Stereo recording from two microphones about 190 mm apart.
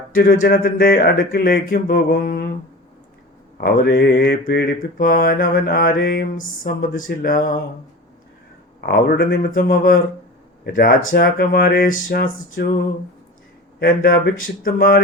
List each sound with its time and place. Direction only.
0.1 s mantra: 50° left (ahead or behind)
3.6 s mantra: 55° left (ahead or behind)
8.9 s mantra: 55° left (ahead or behind)
10.6 s speech: 50° left (ahead or behind)
11.1 s mantra: 50° left (ahead or behind)
12.6 s a sound: 60° left (ahead or behind)
13.7 s speech: 50° left (ahead or behind)
14.4 s mantra: 50° left (ahead or behind)